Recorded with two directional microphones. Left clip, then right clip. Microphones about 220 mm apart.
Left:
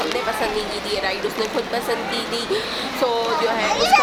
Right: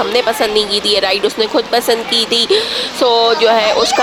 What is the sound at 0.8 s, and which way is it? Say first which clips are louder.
A woman's voice: right 10 dB; 35° right (ahead or behind).